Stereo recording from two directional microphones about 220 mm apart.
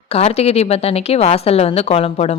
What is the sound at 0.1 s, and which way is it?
Speech, 25° left (ahead or behind).